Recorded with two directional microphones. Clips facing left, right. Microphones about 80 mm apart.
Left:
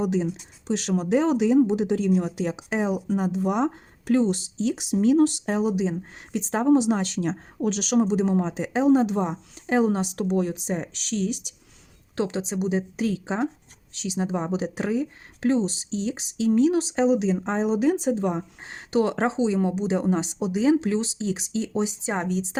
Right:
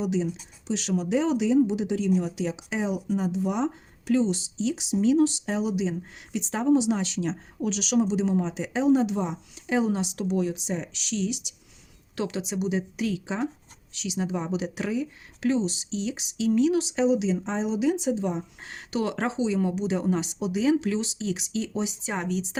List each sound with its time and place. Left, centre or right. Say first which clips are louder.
0.0 s speech: left 2 dB; left
12.1 s a woman's voice: left 3 dB; left
18.6 s a woman's voice: left 7 dB; left